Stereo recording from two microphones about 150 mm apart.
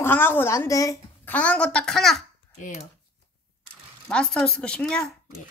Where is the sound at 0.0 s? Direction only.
15° left (ahead or behind).